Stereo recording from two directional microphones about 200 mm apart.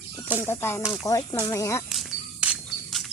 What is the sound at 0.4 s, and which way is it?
A woman's voice, 10° left (ahead or behind).